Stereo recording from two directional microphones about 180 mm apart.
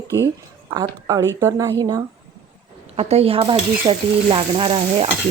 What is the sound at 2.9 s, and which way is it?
Stir, 35° right (ahead or behind).